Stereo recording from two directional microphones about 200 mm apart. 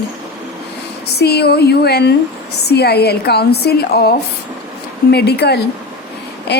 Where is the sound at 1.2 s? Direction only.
55° left (ahead or behind).